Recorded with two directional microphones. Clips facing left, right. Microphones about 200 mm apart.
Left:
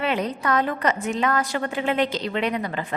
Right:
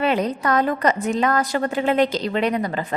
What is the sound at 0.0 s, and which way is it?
A woman's voice, 40° right (ahead or behind).